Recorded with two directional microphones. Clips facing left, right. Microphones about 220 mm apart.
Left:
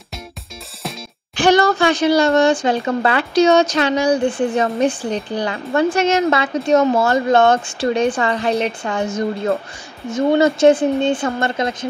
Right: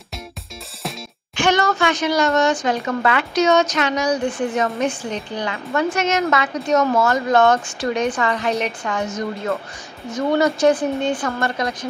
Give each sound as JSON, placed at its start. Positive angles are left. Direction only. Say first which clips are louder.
{"t": 1.3, "sound": "speech", "louder": "left 5 dB", "side_deg": 35}